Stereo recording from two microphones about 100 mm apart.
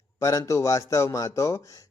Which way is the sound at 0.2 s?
35° left (ahead or behind).